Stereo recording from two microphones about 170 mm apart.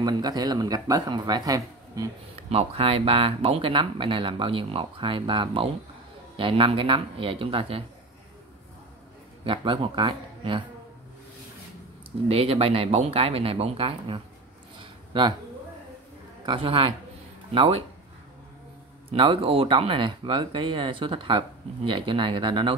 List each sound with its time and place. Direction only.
0.0 s speech: 25° right (ahead or behind)
2.5 s speech: 35° right (ahead or behind)
9.4 s speech: 30° right (ahead or behind)
12.3 s speech: 35° right (ahead or behind)
14.8 s a sound: 30° right (ahead or behind)
16.4 s speech: 30° right (ahead or behind)
19.1 s speech: 30° right (ahead or behind)